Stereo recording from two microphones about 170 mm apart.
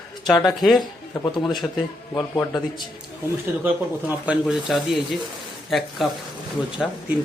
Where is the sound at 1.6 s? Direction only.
20° left (ahead or behind).